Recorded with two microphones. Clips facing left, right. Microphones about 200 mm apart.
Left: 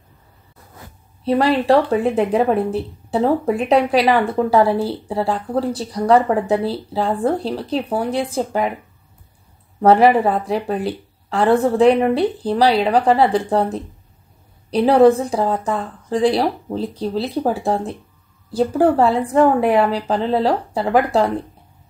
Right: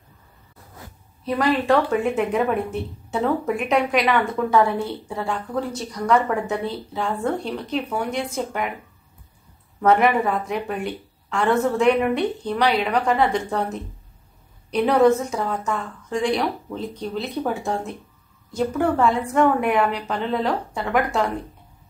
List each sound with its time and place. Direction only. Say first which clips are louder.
1.2 s speech: left 5 dB; 35° left (ahead or behind)
9.8 s speech: left 5 dB; 35° left (ahead or behind)